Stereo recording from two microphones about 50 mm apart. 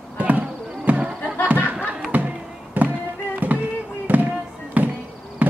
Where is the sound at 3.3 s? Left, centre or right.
Right.